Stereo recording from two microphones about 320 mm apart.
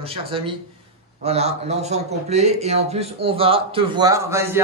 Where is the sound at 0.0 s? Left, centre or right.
Centre.